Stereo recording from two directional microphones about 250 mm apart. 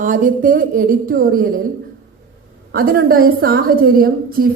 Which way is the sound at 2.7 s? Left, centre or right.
Right.